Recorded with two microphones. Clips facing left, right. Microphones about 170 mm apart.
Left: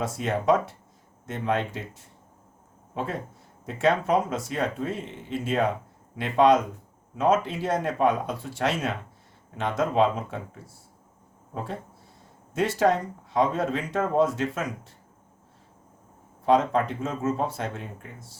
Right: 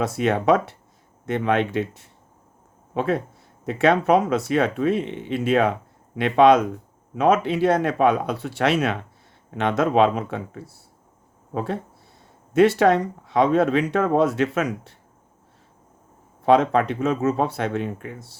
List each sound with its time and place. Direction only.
0.0 s speech: 75° right (ahead or behind)
16.5 s speech: 75° right (ahead or behind)